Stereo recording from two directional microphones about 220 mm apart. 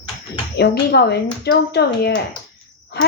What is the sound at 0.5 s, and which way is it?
Speech, 50° left (ahead or behind).